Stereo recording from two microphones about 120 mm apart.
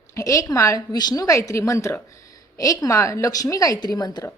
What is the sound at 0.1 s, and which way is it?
A woman's voice, 25° left (ahead or behind).